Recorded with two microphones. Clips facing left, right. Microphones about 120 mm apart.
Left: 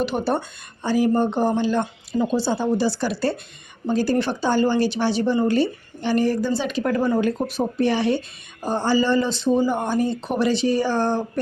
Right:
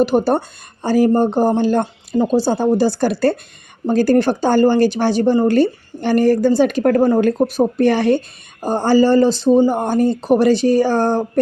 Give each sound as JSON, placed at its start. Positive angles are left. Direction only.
{"t": 0.0, "sound": "speech", "side_deg": -40}